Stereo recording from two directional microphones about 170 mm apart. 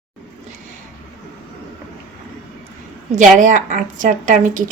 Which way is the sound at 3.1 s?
50° right (ahead or behind).